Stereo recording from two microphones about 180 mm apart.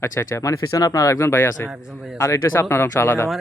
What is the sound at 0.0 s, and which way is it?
A man's voice, 15° left (ahead or behind).